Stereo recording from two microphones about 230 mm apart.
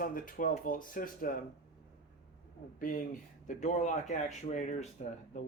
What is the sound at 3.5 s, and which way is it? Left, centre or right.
Speech, left.